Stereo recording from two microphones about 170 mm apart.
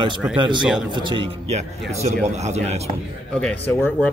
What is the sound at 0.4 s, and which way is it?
Speech, 25° right (ahead or behind).